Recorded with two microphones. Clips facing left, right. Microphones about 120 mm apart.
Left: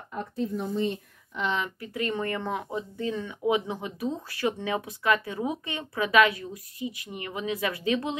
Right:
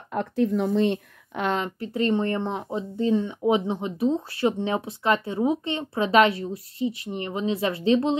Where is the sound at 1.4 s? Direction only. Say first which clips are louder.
Right 3 dB; 40° right (ahead or behind).